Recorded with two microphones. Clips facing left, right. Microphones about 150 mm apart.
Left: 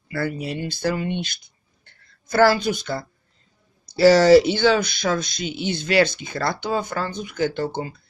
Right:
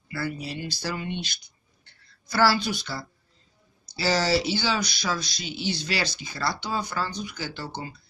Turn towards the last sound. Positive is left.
turn(degrees=50)  # may be behind; listen again after turning